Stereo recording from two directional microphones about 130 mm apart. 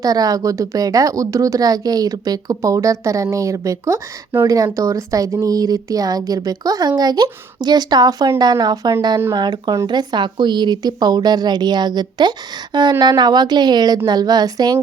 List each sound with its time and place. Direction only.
0.0 s a woman's voice: 30° right (ahead or behind)